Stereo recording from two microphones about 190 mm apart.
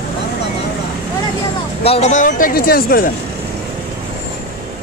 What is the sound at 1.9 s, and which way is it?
Speech, 35° left (ahead or behind).